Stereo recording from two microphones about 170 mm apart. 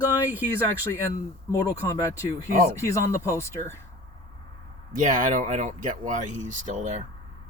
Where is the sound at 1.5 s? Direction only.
20° left (ahead or behind).